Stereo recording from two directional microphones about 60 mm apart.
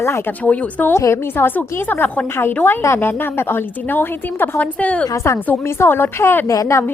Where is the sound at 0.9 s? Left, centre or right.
Left.